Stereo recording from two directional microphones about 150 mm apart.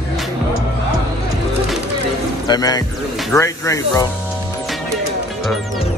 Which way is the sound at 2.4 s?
25° left (ahead or behind).